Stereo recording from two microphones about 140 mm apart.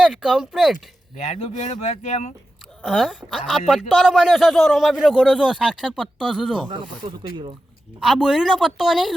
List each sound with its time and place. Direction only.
0.0 s a man's voice: 5° right (ahead or behind)
1.2 s speech: 55° left (ahead or behind)
2.8 s a man's voice: centre (ahead or behind)
6.7 s speech: 35° right (ahead or behind)
8.0 s a man's voice: centre (ahead or behind)